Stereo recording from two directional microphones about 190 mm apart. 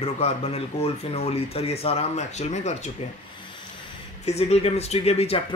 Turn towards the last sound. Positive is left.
turn(degrees=30)  # may be behind; listen again after turning